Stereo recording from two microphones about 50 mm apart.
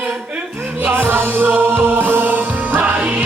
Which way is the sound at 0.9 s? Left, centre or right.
Right.